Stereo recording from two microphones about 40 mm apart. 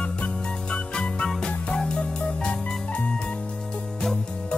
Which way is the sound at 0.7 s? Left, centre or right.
Left.